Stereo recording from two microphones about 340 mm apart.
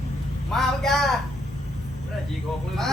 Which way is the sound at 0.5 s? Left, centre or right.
Centre.